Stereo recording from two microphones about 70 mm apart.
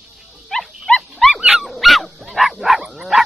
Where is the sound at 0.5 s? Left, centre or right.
Centre.